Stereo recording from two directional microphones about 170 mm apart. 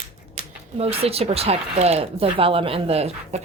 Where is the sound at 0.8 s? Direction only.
35° right (ahead or behind).